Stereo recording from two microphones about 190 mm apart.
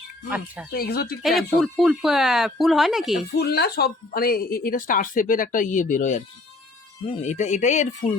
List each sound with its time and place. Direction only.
0.3 s speech: 10° right (ahead or behind)
0.7 s speech: 50° left (ahead or behind)
1.2 s speech: centre (ahead or behind)
3.3 s speech: 60° left (ahead or behind); by 7.9 s 40° left (ahead or behind)